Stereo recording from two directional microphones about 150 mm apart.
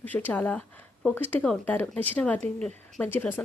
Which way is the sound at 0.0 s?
10° left (ahead or behind).